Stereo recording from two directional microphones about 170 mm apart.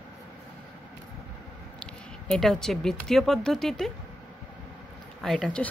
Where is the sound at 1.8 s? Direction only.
5° left (ahead or behind).